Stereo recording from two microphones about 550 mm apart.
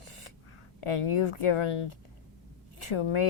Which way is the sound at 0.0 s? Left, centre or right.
Left.